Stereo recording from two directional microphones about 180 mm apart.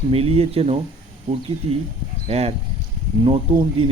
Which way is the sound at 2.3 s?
35° right (ahead or behind).